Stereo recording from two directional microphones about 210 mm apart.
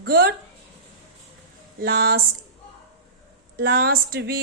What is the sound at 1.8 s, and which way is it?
Speech, 45° right (ahead or behind).